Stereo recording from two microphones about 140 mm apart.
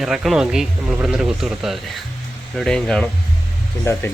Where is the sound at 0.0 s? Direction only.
5° right (ahead or behind).